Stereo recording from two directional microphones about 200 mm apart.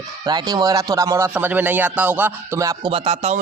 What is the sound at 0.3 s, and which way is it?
Speech, 20° right (ahead or behind).